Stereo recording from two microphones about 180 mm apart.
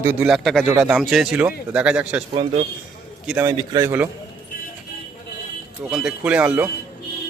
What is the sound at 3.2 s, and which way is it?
Speech, 10° right (ahead or behind).